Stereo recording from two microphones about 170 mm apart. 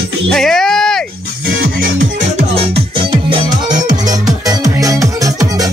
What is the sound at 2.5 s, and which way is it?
Music, 35° right (ahead or behind).